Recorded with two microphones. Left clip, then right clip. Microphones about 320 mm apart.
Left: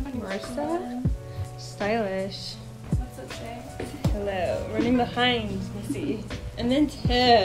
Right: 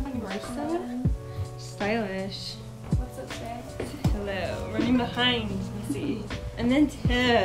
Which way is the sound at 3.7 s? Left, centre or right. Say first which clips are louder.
Left 3 dB; centre.